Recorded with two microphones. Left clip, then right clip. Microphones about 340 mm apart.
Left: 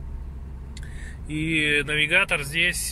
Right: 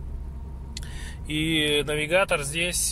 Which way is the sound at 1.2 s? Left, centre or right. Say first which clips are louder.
Left 1 dB; right.